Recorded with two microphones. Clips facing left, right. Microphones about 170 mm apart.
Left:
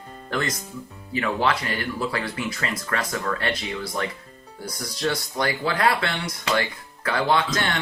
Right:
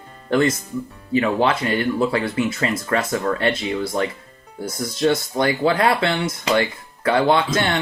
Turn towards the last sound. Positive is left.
turn(degrees=-25)  # may be behind; listen again after turning